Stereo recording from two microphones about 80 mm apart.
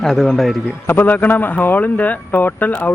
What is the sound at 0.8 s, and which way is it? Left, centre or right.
Speech, left.